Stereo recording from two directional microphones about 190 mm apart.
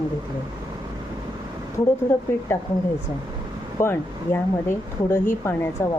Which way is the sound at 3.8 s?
15° left (ahead or behind).